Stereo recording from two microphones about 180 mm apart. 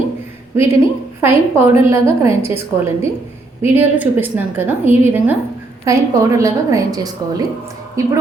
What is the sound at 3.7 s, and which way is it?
A woman's voice, 10° right (ahead or behind).